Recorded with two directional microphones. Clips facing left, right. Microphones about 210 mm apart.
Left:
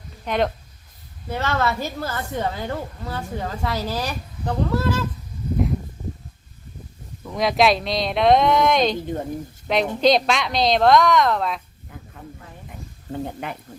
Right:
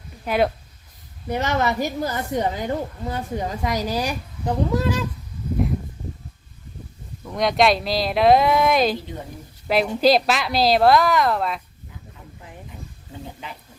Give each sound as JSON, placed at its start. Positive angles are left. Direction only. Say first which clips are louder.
{"t": 0.3, "sound": "a woman's voice", "louder": "right 2 dB", "side_deg": -5}
{"t": 7.3, "sound": "a woman's voice", "louder": "even", "side_deg": 0}
{"t": 13.1, "sound": "speech", "louder": "left 9 dB", "side_deg": 55}